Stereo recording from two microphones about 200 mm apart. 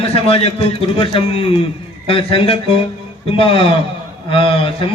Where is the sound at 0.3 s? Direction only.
30° left (ahead or behind).